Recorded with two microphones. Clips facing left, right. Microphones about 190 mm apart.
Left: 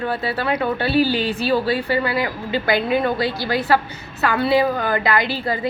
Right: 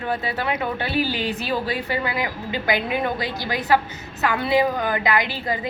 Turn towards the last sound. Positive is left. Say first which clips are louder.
# left 2 dB
turn(degrees=-15)  # may be behind; listen again after turning